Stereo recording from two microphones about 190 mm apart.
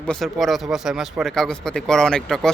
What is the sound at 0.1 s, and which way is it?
Speech, centre (ahead or behind).